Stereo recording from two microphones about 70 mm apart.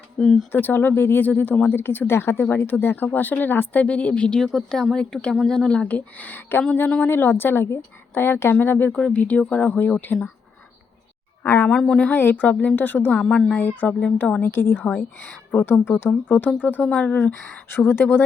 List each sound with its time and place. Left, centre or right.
0.2 s speech: centre
0.5 s a woman's voice: left
8.9 s a woman's voice: centre
10.1 s speech: centre
11.4 s a woman's voice: left
11.7 s speech: centre
12.1 s a woman's voice: left
13.1 s speech: centre
13.6 s a woman's voice: left
14.4 s speech: left
16.9 s speech: centre
17.2 s speech: left